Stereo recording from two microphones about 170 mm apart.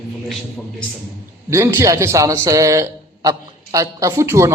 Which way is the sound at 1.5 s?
15° right (ahead or behind).